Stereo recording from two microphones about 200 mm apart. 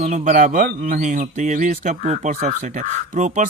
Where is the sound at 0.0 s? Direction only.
35° right (ahead or behind).